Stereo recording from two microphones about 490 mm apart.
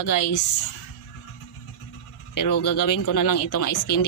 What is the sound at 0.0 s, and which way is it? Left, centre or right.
Speech, left.